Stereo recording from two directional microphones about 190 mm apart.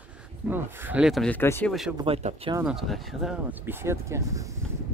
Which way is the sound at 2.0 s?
30° right (ahead or behind).